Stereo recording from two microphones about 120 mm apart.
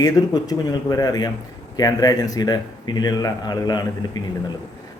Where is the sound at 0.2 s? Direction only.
35° left (ahead or behind).